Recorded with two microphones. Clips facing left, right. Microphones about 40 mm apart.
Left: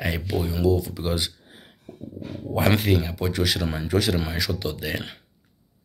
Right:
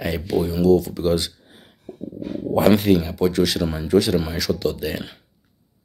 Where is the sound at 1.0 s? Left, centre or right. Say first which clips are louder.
Right 6 dB; left.